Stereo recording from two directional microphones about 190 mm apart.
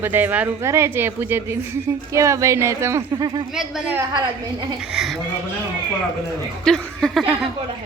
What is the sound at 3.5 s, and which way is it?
A child's voice, centre (ahead or behind).